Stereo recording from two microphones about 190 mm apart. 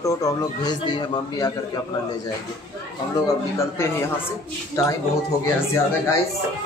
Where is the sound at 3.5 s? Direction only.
15° left (ahead or behind).